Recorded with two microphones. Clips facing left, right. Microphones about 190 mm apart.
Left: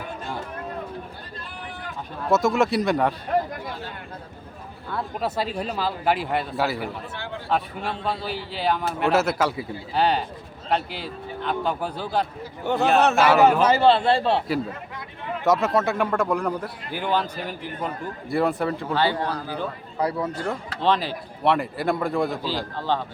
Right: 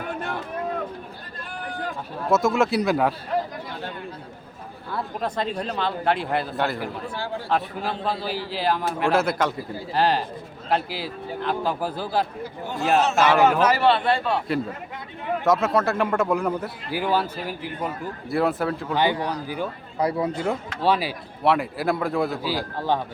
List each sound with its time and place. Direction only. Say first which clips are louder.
2.2 s a man's voice: even; centre (ahead or behind)
4.9 s a man's voice: left 1 dB; centre (ahead or behind)
12.6 s speech: left 6 dB; 65° left (ahead or behind)
13.1 s a man's voice: even; centre (ahead or behind)
13.6 s a man's voice: left 2 dB; 25° left (ahead or behind)
15.4 s a man's voice: even; centre (ahead or behind)
18.9 s a man's voice: right 1 dB; 15° right (ahead or behind)